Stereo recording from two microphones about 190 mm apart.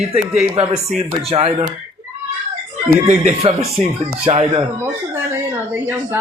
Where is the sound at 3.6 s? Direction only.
Centre (ahead or behind).